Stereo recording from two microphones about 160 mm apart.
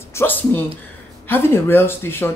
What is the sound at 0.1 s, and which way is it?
Speech, 15° left (ahead or behind).